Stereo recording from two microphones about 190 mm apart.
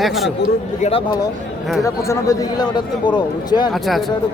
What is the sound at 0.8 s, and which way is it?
Speech, 25° left (ahead or behind).